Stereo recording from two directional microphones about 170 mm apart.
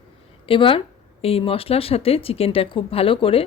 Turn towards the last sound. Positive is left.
turn(degrees=35)  # may be behind; listen again after turning